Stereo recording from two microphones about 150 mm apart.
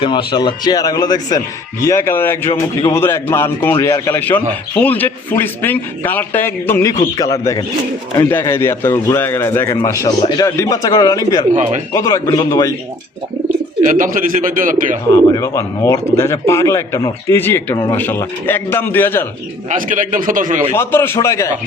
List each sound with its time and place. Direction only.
0.0 s speech: 35° left (ahead or behind); by 6.9 s 15° left (ahead or behind)
8.3 s speech: 15° left (ahead or behind)
11.5 s speech: 50° right (ahead or behind)
11.9 s speech: 20° left (ahead or behind)
13.8 s speech: 60° right (ahead or behind)
15.1 s speech: 20° left (ahead or behind)
19.7 s speech: 65° right (ahead or behind)
20.7 s speech: 15° left (ahead or behind)